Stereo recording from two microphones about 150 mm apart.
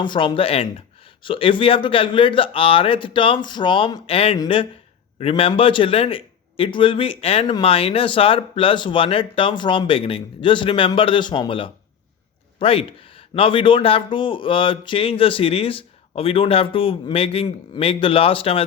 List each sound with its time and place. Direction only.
0.0 s speech: 30° left (ahead or behind)